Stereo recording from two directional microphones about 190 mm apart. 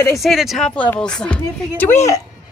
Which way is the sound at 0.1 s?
Centre (ahead or behind).